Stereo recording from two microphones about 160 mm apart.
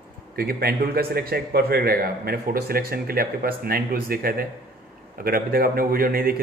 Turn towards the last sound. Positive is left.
turn(degrees=-65)  # may be behind; listen again after turning